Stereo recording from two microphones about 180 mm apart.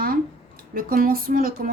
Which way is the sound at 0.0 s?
55° right (ahead or behind).